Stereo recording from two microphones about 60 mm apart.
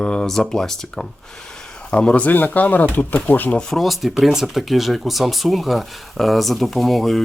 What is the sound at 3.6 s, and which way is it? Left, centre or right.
Speech, centre.